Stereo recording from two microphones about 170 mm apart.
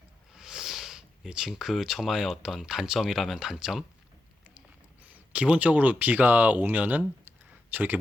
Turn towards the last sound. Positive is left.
turn(degrees=-10)  # may be behind; listen again after turning